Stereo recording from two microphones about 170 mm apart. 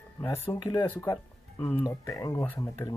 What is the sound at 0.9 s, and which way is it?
Music, 15° left (ahead or behind).